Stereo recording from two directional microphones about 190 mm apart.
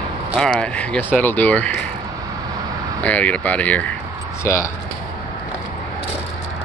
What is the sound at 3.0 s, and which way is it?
Speech, 5° left (ahead or behind).